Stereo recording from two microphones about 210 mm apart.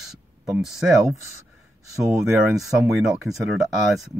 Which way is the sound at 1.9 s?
15° right (ahead or behind).